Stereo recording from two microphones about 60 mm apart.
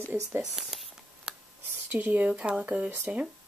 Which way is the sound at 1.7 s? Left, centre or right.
Right.